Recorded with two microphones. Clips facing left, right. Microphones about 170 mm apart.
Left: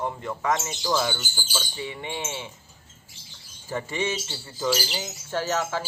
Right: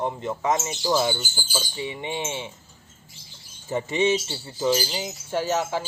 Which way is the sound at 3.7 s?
20° right (ahead or behind).